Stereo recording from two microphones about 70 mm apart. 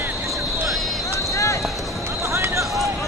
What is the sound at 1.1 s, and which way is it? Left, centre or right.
Run, left.